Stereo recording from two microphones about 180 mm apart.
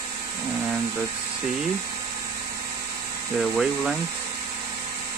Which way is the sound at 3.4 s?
Centre (ahead or behind).